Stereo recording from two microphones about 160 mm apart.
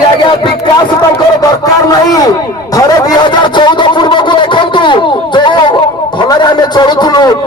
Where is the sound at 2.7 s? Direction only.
25° left (ahead or behind).